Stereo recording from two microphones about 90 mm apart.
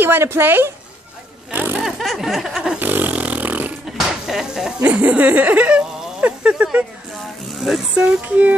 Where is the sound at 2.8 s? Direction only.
20° right (ahead or behind).